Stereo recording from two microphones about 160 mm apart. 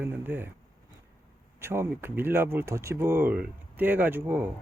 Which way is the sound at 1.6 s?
15° right (ahead or behind).